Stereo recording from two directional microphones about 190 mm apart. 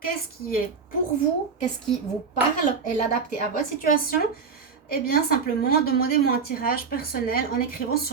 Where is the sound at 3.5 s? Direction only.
50° left (ahead or behind).